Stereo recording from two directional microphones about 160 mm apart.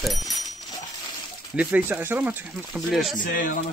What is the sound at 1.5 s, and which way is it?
Speech, 10° right (ahead or behind).